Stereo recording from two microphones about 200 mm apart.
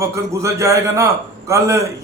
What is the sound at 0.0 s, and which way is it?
A man's voice, 15° right (ahead or behind).